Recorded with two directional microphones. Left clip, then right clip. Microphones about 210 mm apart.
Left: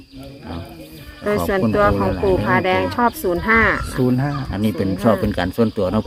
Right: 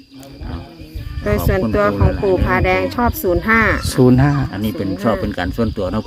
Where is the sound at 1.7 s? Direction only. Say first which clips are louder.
Even; 25° right (ahead or behind).